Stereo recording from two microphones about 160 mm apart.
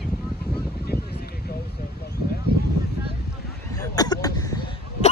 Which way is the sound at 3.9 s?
25° left (ahead or behind).